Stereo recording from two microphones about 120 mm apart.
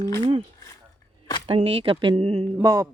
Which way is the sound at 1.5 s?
55° right (ahead or behind).